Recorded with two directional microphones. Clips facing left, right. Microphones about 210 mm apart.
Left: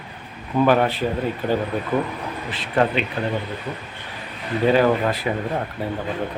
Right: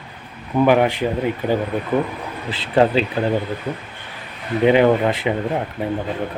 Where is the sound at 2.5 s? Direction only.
30° right (ahead or behind).